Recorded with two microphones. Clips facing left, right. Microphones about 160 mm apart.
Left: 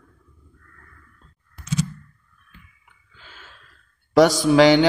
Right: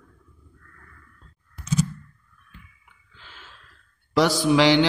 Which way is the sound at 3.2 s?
45° left (ahead or behind).